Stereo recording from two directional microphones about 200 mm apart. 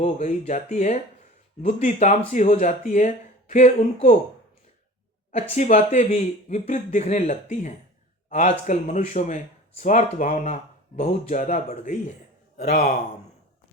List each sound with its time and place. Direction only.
0.0 s speech: 35° left (ahead or behind)
5.5 s speech: 35° left (ahead or behind)